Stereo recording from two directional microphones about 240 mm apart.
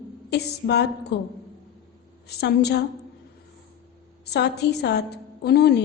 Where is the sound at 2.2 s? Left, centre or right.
Left.